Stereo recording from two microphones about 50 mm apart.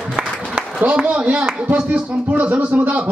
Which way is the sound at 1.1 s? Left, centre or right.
Right.